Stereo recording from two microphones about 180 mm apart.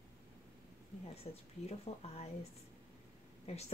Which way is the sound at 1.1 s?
35° left (ahead or behind).